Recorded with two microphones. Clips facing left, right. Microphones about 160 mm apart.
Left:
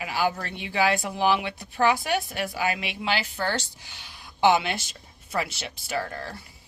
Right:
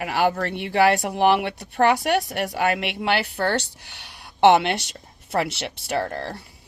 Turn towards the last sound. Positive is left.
turn(degrees=-70)  # may be behind; listen again after turning